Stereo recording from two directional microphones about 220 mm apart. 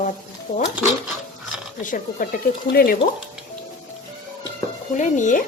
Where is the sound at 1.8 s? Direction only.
35° left (ahead or behind).